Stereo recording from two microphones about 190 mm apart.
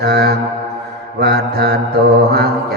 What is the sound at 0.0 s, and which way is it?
Music, 55° right (ahead or behind).